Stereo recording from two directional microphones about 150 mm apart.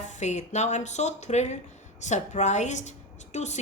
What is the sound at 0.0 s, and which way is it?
A woman's voice, 50° left (ahead or behind).